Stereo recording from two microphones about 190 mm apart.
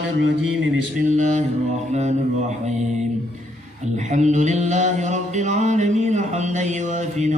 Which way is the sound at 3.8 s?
40° right (ahead or behind).